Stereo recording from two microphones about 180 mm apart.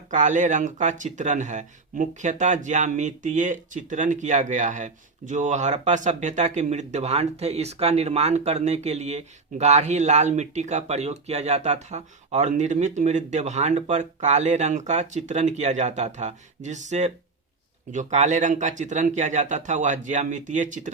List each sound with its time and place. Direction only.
0.1 s speech: 45° right (ahead or behind)